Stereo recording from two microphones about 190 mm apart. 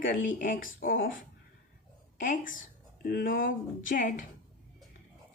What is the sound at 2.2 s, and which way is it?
Speech, 45° left (ahead or behind).